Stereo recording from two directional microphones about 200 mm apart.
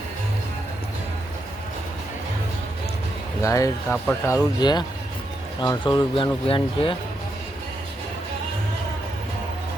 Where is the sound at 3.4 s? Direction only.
15° left (ahead or behind).